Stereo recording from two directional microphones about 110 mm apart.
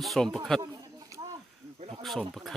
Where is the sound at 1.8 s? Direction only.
60° right (ahead or behind).